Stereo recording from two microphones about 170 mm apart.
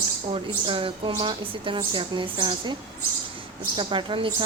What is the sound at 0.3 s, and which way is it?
A woman's voice, 30° right (ahead or behind).